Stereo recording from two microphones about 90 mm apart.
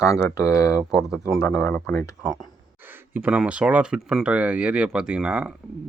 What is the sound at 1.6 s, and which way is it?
Speech, 20° left (ahead or behind).